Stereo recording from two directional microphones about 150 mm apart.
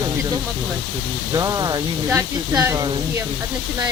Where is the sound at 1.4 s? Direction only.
25° right (ahead or behind).